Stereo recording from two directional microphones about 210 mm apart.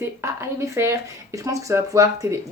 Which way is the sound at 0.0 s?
15° right (ahead or behind).